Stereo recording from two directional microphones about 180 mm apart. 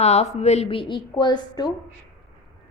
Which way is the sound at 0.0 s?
35° left (ahead or behind).